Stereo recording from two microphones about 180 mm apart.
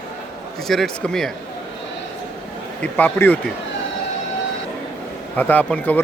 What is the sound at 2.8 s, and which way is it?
Speech, 10° left (ahead or behind).